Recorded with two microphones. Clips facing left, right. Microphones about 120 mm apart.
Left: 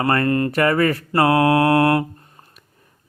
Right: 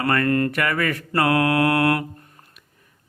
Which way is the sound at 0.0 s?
30° left (ahead or behind).